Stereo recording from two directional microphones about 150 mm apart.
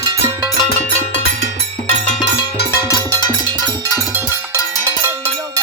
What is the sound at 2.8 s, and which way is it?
Music, 20° left (ahead or behind).